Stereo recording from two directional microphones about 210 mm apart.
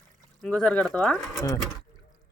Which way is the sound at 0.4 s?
5° left (ahead or behind).